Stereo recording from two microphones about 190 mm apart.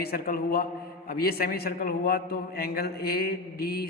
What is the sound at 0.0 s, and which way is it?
A man's voice, 55° left (ahead or behind).